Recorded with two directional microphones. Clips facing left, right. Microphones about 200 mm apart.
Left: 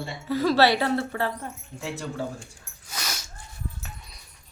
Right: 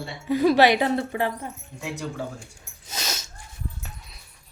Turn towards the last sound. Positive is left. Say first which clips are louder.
# right 2 dB
turn(degrees=-25)  # may be behind; listen again after turning